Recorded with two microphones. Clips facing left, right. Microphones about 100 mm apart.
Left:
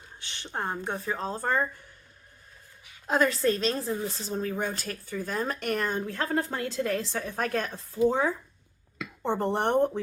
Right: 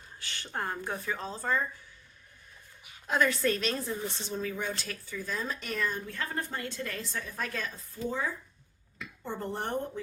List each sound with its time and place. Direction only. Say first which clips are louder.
0.2 s speech: left 2 dB; 20° left (ahead or behind); by 1.6 s 55° left (ahead or behind)
3.1 s a woman's voice: left 3 dB; 35° left (ahead or behind); by 10.0 s 70° left (ahead or behind)